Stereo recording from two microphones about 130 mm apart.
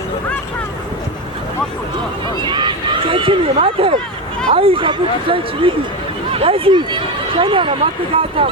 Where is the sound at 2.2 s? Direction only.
35° right (ahead or behind).